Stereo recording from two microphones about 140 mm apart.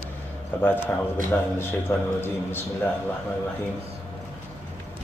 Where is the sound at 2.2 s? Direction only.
15° left (ahead or behind).